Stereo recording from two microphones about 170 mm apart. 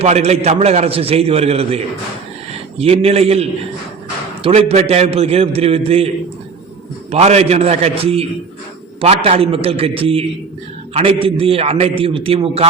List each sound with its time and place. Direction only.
0.0 s a man's voice: 40° right (ahead or behind)
7.1 s a man's voice: 40° right (ahead or behind)